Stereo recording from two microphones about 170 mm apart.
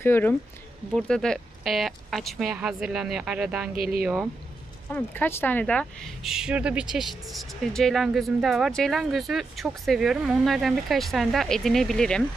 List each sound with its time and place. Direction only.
0.0 s speech: 10° left (ahead or behind); by 3.7 s 5° right (ahead or behind)
3.7 s speech: 60° right (ahead or behind)
4.0 s speech: 5° right (ahead or behind)
4.9 s speech: 10° left (ahead or behind)
6.3 s speech: 5° right (ahead or behind)